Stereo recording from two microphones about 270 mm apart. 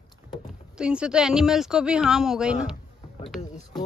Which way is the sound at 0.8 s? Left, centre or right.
Centre.